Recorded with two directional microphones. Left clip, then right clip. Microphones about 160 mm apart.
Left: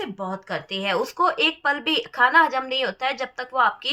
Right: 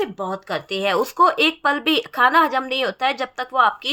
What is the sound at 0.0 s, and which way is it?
A woman's voice, 50° right (ahead or behind).